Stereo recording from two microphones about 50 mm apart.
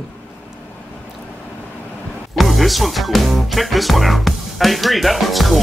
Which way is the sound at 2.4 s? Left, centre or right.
Centre.